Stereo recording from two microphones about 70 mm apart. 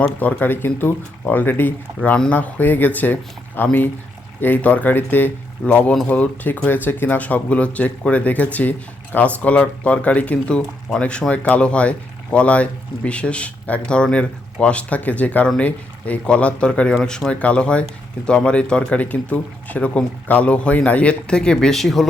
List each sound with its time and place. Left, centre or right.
0.2 s speech: left
2.0 s speech: centre
2.3 s speech: left; by 22.0 s centre